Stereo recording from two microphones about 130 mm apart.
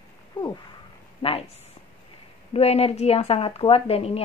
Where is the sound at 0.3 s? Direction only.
40° left (ahead or behind).